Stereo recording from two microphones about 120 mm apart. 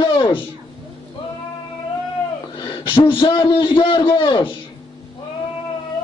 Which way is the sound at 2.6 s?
45° left (ahead or behind).